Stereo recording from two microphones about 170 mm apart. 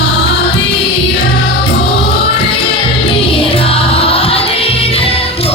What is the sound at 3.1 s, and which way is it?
Music, 35° left (ahead or behind).